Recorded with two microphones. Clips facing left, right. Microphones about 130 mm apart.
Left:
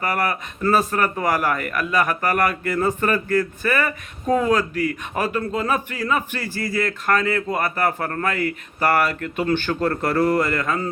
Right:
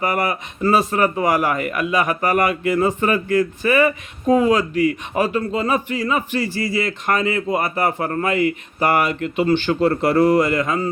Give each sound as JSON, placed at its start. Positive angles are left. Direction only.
{"t": 0.0, "sound": "speech", "side_deg": -15}
{"t": 4.7, "sound": "a man's voice", "side_deg": 50}
{"t": 5.1, "sound": "speech", "side_deg": -5}